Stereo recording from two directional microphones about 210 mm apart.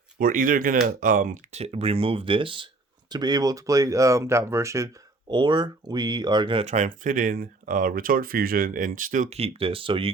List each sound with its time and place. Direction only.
0.2 s speech: 40° right (ahead or behind); by 10.1 s 25° right (ahead or behind)